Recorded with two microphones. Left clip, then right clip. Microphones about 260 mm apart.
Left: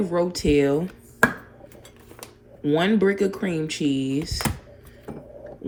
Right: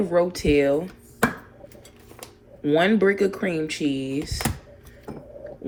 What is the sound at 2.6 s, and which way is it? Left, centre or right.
Speech, centre.